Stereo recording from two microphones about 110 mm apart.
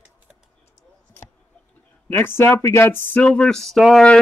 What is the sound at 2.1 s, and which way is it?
Speech, 20° left (ahead or behind).